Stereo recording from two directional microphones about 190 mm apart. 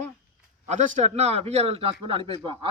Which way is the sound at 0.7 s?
40° right (ahead or behind).